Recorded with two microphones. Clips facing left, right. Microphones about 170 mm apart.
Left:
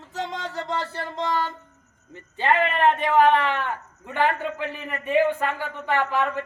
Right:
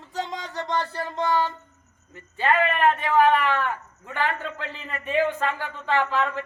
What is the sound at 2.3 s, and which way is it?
A man's voice, 20° left (ahead or behind).